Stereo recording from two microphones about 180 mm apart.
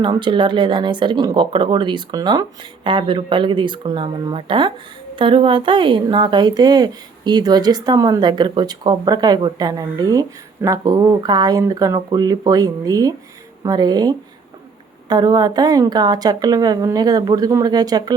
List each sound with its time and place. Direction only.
0.0 s a woman's voice: 25° right (ahead or behind)